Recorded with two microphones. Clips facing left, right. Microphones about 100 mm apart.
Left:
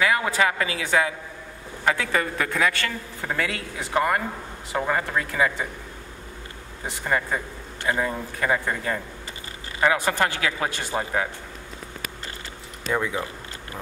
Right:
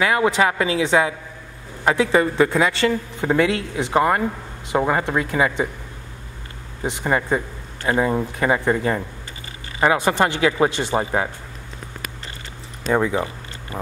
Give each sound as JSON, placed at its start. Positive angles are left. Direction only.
{"t": 0.0, "sound": "speech", "side_deg": -20}
{"t": 6.8, "sound": "speech", "side_deg": -20}
{"t": 12.8, "sound": "speech", "side_deg": -35}